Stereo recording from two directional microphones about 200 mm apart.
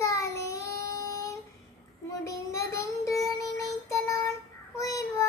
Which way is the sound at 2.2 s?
15° left (ahead or behind).